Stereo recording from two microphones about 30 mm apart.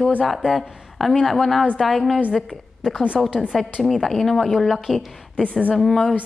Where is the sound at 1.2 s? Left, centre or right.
Centre.